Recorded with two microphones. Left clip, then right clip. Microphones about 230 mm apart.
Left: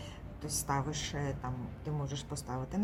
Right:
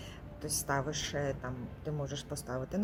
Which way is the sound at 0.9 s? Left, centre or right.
Left.